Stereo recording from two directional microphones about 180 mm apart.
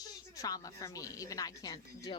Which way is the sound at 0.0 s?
20° left (ahead or behind).